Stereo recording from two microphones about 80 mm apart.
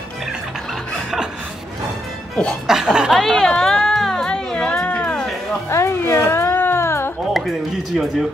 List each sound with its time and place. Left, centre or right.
2.6 s speech: centre
3.2 s music: centre
5.7 s music: left
7.3 s speech: centre